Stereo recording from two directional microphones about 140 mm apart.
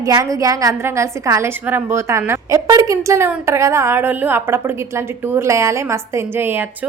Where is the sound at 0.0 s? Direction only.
25° right (ahead or behind).